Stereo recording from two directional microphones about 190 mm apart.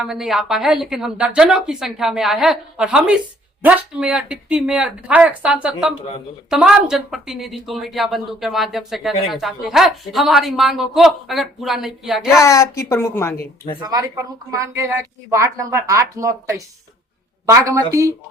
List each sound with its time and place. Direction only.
0.0 s speech: centre (ahead or behind)
12.3 s a woman's voice: 15° left (ahead or behind)
13.8 s a woman's voice: 15° right (ahead or behind)